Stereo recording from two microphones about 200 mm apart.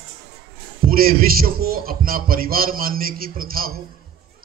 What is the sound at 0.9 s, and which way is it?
A man's voice, 45° right (ahead or behind).